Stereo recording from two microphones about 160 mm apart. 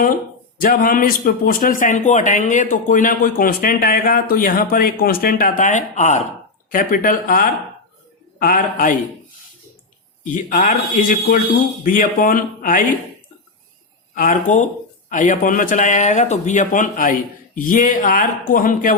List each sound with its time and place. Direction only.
0.6 s a man's voice: 60° left (ahead or behind)
6.7 s a man's voice: 60° left (ahead or behind)
10.3 s a man's voice: 55° left (ahead or behind)
14.2 s a man's voice: 55° left (ahead or behind)